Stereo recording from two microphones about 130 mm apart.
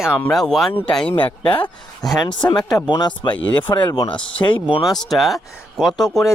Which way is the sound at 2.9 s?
35° left (ahead or behind).